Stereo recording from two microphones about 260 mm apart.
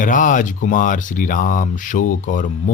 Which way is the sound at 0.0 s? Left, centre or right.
Left.